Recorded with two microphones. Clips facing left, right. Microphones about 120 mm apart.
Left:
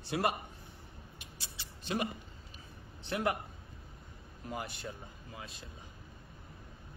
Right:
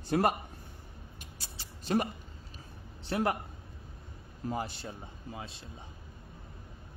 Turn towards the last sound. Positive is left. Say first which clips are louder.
# right 4 dB
turn(degrees=-30)  # may be behind; listen again after turning